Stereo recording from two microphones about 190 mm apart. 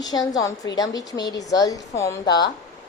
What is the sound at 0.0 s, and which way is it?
Speech, 20° left (ahead or behind).